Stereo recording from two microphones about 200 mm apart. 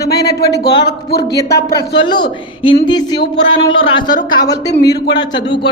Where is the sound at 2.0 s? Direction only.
20° left (ahead or behind).